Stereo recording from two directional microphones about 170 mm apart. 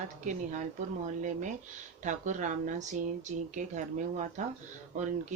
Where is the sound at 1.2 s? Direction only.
45° right (ahead or behind).